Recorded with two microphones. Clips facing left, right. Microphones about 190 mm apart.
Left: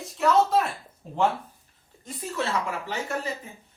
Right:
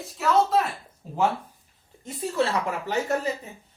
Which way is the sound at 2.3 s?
35° right (ahead or behind).